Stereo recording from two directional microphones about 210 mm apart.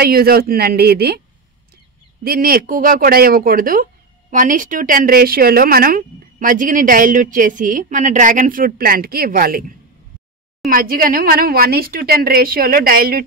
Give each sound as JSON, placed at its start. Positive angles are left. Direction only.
{"t": 0.0, "sound": "a woman's voice", "side_deg": -45}
{"t": 2.2, "sound": "speech", "side_deg": -45}
{"t": 10.7, "sound": "a woman's voice", "side_deg": -45}